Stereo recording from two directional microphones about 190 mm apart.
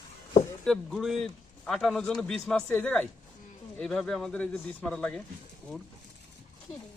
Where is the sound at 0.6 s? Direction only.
Centre (ahead or behind).